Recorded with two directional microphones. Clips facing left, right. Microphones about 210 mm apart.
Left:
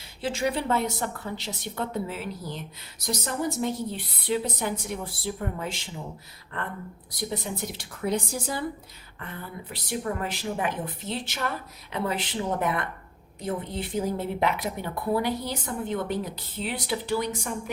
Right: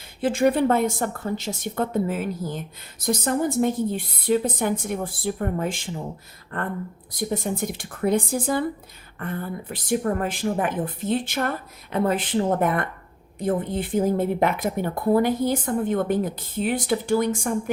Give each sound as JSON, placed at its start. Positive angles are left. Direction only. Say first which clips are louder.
{"t": 0.2, "sound": "a woman's voice", "louder": "right 8 dB", "side_deg": -55}